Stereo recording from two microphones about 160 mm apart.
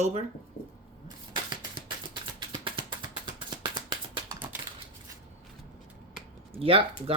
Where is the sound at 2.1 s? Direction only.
30° right (ahead or behind).